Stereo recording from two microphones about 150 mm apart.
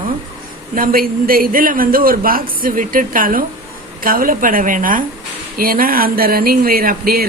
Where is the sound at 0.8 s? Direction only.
75° right (ahead or behind).